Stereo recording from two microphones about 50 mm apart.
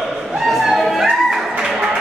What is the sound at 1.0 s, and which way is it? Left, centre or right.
Music, centre.